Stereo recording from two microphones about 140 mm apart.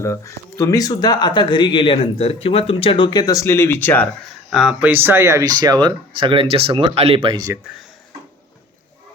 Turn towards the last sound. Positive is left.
turn(degrees=0)  # may be behind; listen again after turning